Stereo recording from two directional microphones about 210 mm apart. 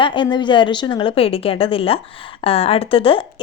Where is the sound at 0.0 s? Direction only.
20° left (ahead or behind).